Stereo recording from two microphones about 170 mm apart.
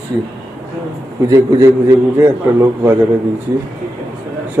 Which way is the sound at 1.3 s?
15° right (ahead or behind).